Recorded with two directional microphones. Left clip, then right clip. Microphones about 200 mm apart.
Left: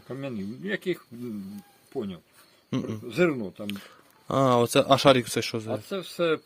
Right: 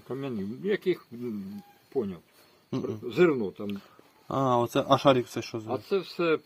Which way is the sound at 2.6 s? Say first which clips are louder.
Even; 50° left (ahead or behind).